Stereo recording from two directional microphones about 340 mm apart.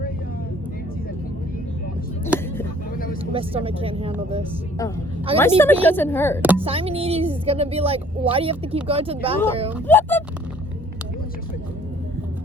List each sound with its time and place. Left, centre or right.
2.3 s a sound: centre
3.3 s a woman's voice: centre
5.4 s speech: centre
6.6 s a woman's voice: centre
9.7 s speech: centre